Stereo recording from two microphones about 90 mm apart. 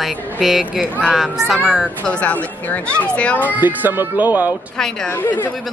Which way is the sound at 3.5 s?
20° right (ahead or behind).